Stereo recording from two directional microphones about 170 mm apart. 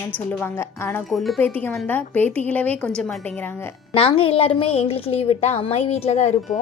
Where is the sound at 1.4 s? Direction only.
10° left (ahead or behind).